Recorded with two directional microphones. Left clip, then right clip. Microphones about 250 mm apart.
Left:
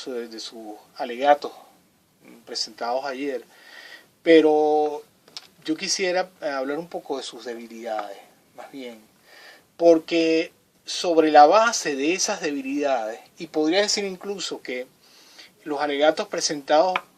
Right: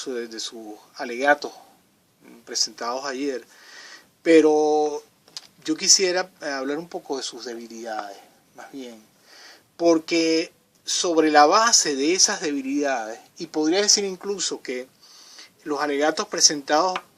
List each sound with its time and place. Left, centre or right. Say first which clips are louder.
0.0 s speech: right 2 dB; right
2.7 s speech: left 1 dB; right